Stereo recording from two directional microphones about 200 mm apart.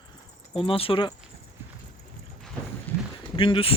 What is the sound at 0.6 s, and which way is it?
Speech, 30° left (ahead or behind).